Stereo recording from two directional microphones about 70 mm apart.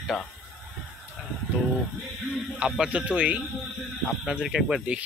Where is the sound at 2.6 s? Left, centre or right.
Centre.